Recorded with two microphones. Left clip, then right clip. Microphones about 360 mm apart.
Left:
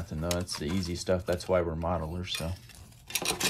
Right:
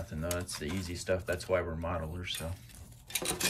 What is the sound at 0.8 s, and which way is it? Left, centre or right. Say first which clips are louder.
Speech: left 3 dB; centre.